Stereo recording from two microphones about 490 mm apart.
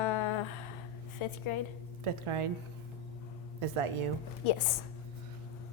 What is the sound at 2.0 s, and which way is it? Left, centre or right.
Speech, right.